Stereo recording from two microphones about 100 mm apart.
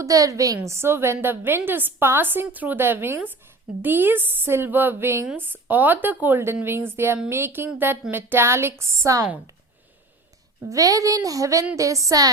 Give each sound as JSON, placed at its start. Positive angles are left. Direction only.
{"t": 0.0, "sound": "a woman's voice", "side_deg": -35}
{"t": 10.7, "sound": "a woman's voice", "side_deg": -35}